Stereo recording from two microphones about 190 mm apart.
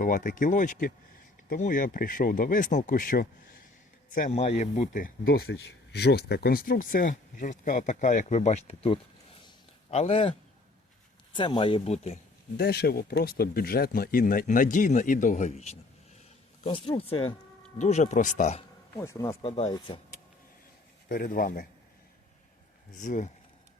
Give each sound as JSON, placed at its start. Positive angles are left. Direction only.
{"t": 0.0, "sound": "speech", "side_deg": 45}
{"t": 12.5, "sound": "speech", "side_deg": 55}
{"t": 18.9, "sound": "speech", "side_deg": 15}
{"t": 21.1, "sound": "speech", "side_deg": 50}
{"t": 23.0, "sound": "speech", "side_deg": 40}